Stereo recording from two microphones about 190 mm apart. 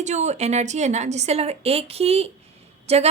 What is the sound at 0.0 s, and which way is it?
A woman's voice, 35° right (ahead or behind).